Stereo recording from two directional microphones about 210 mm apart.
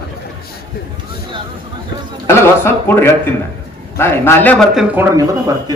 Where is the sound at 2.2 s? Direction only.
10° left (ahead or behind); by 5.7 s 15° right (ahead or behind).